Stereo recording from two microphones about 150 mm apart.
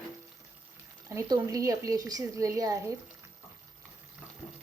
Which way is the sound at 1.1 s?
20° right (ahead or behind).